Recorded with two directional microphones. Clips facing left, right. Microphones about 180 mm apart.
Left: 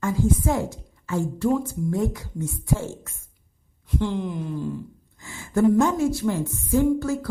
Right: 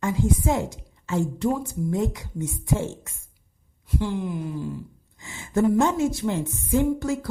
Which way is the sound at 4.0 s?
5° right (ahead or behind).